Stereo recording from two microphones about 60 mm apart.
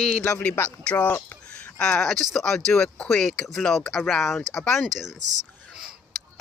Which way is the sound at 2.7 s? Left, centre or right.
Left.